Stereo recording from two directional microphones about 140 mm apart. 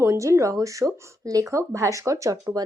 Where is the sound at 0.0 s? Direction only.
20° right (ahead or behind).